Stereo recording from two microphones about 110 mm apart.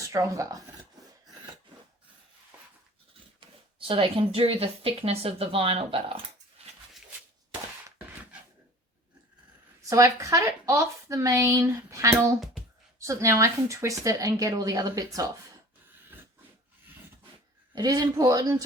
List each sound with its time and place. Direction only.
0.0 s speech: 30° right (ahead or behind)
3.8 s speech: 55° right (ahead or behind)
9.9 s a woman's voice: 30° right (ahead or behind)
12.1 s speech: 5° right (ahead or behind)
13.0 s a woman's voice: 30° right (ahead or behind)
17.7 s a woman's voice: 35° right (ahead or behind)